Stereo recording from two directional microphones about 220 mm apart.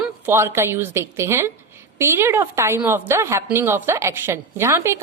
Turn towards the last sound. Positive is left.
turn(degrees=-10)  # may be behind; listen again after turning